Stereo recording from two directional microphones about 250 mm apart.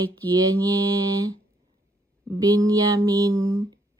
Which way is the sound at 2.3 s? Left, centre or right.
Centre.